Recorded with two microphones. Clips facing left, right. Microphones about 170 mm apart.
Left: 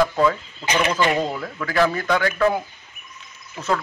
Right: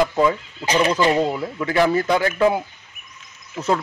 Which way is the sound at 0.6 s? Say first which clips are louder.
Right 3 dB; 35° right (ahead or behind).